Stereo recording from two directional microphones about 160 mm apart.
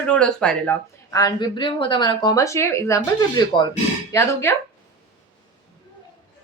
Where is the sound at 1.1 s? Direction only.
25° left (ahead or behind).